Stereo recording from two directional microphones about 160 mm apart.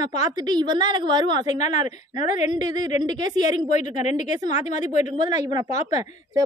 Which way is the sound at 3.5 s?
50° left (ahead or behind).